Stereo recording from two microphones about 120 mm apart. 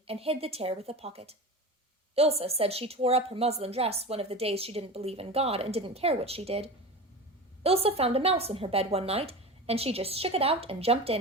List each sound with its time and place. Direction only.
0.1 s a woman's voice: 55° right (ahead or behind)